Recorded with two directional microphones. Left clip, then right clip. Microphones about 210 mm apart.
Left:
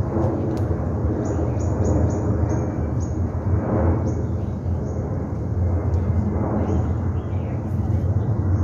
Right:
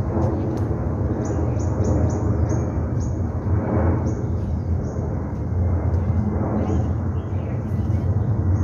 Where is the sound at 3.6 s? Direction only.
10° right (ahead or behind).